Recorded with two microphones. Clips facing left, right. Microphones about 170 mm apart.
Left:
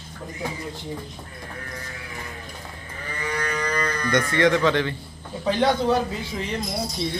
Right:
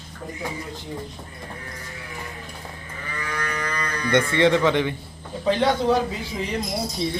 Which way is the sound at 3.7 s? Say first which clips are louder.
Left 3 dB; 45° left (ahead or behind).